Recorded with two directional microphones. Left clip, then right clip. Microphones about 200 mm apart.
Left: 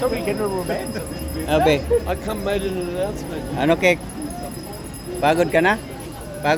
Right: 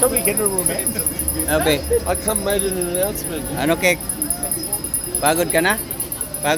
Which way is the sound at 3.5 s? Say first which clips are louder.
Left 1 dB; 15° left (ahead or behind).